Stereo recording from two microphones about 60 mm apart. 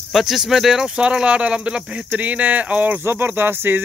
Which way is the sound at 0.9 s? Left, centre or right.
Centre.